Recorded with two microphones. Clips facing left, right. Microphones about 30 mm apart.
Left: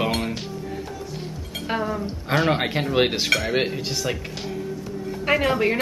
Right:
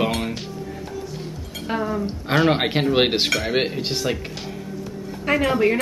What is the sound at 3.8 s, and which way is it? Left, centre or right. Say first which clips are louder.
Speech: right 2 dB; centre.